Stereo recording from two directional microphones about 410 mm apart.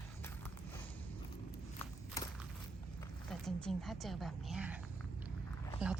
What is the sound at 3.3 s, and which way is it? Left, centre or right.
A woman's voice, centre.